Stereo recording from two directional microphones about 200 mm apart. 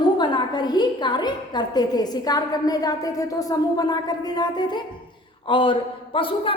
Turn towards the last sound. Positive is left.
turn(degrees=25)  # may be behind; listen again after turning